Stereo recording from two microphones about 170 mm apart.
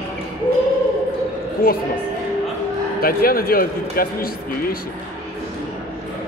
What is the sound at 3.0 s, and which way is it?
Speech, 60° left (ahead or behind).